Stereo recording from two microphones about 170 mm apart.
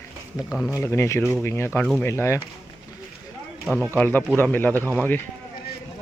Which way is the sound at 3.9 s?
10° left (ahead or behind).